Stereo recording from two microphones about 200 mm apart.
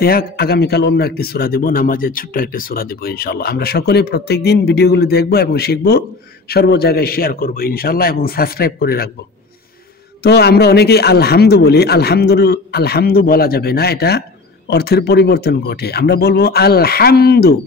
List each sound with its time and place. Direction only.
0.0 s a man's voice: 50° left (ahead or behind)
10.2 s a man's voice: 55° left (ahead or behind)